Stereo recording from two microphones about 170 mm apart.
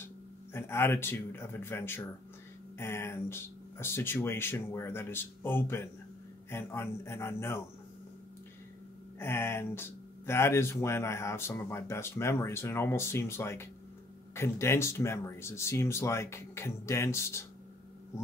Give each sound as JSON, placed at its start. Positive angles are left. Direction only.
{"t": 0.0, "sound": "speech", "side_deg": 15}
{"t": 9.2, "sound": "speech", "side_deg": 15}